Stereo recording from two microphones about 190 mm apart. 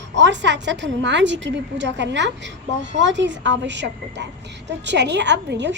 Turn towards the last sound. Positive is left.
turn(degrees=-65)  # may be behind; listen again after turning